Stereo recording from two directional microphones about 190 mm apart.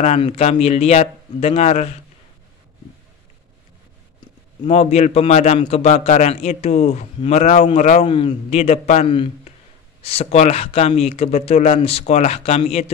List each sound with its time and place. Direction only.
0.0 s speech: 35° left (ahead or behind)
4.6 s speech: 35° left (ahead or behind)
8.1 s speech: 25° left (ahead or behind)